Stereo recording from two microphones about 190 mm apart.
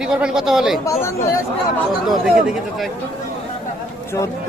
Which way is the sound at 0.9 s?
15° left (ahead or behind).